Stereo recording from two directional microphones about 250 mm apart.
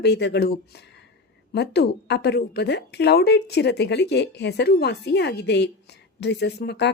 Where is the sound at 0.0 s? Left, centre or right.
Left.